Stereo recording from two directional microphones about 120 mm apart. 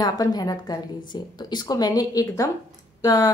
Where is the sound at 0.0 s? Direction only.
35° left (ahead or behind).